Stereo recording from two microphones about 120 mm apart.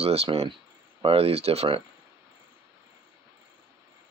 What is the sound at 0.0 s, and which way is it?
Speech, 55° right (ahead or behind).